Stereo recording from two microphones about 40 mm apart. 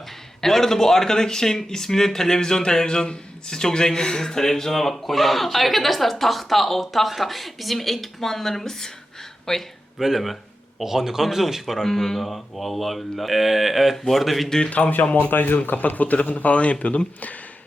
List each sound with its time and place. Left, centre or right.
0.4 s speech: centre
10.0 s speech: centre
14.7 s speech: left
15.3 s speech: left